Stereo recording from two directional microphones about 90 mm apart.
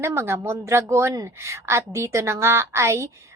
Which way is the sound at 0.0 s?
30° right (ahead or behind).